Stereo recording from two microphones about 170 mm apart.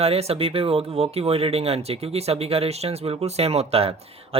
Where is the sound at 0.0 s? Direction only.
35° right (ahead or behind).